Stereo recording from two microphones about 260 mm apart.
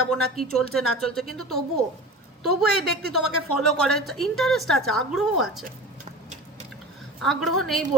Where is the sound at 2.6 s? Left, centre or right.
Right.